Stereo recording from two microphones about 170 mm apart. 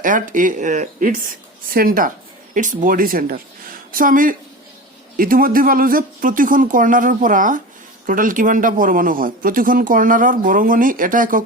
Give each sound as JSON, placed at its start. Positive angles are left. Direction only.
{"t": 0.0, "sound": "speech", "side_deg": -50}